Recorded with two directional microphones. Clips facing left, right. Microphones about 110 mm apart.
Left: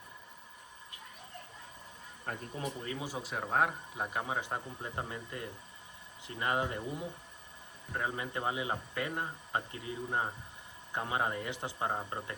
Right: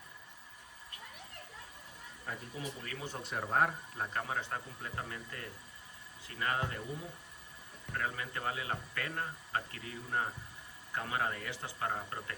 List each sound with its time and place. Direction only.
2.3 s speech: 55° left (ahead or behind)
2.8 s speech: 20° left (ahead or behind)
3.1 s speech: centre (ahead or behind); by 6.8 s 20° left (ahead or behind)
7.9 s speech: 20° left (ahead or behind)